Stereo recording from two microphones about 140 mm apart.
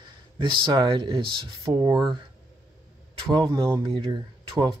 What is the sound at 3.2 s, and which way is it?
Speech, 35° right (ahead or behind).